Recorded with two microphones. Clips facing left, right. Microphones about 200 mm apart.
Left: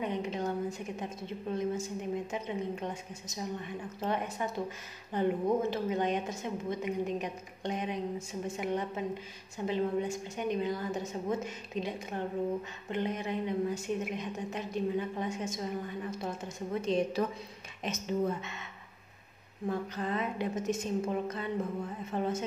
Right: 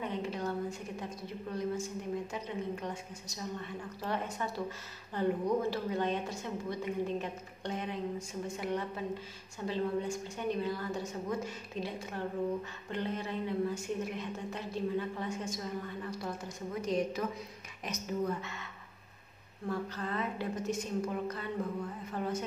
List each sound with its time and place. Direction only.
0.0 s a woman's voice: 20° left (ahead or behind)
19.7 s a woman's voice: 20° left (ahead or behind)